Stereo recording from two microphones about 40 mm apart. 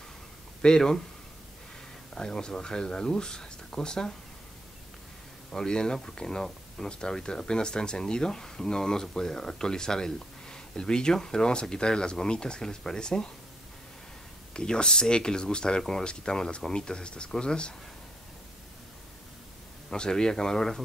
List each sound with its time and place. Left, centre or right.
0.6 s speech: centre
2.1 s speech: centre
5.5 s speech: centre
14.5 s speech: left
19.9 s speech: centre